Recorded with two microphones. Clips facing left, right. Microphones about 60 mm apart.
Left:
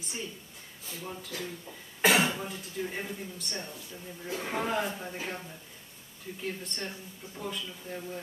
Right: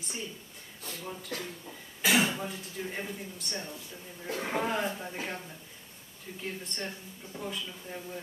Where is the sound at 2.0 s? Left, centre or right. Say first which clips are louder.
Left 2 dB; left.